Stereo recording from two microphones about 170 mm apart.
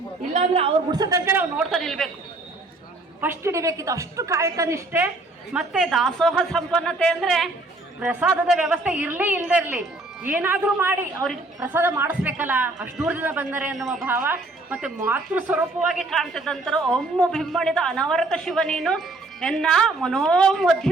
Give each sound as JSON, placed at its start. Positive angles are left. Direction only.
{"t": 0.3, "sound": "a woman's voice", "side_deg": -35}
{"t": 0.9, "sound": "a woman's voice", "side_deg": -20}
{"t": 1.7, "sound": "speech", "side_deg": 0}
{"t": 3.2, "sound": "a woman's voice", "side_deg": -15}
{"t": 5.5, "sound": "a woman's voice", "side_deg": 0}
{"t": 15.9, "sound": "speech", "side_deg": 0}